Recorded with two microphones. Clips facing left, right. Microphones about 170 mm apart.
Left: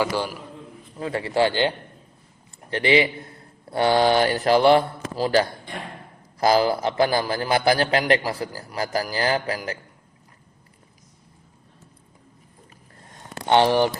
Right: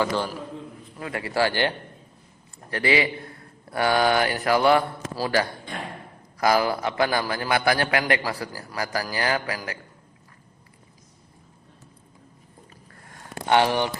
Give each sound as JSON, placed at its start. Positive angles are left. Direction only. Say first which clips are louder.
{"t": 0.0, "sound": "a man's voice", "louder": "left 1 dB", "side_deg": 10}
{"t": 0.9, "sound": "a man's voice", "louder": "left 3 dB", "side_deg": 30}
{"t": 13.5, "sound": "a man's voice", "louder": "left 3 dB", "side_deg": 30}